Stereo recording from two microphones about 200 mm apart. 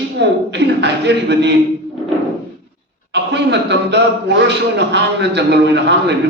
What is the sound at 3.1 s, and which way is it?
A man's voice, 60° right (ahead or behind).